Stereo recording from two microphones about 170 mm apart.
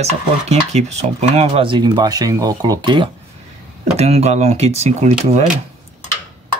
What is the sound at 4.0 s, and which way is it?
Speech, 40° right (ahead or behind).